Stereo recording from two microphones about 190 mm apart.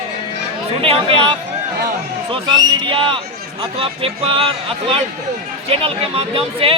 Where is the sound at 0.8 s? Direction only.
30° right (ahead or behind).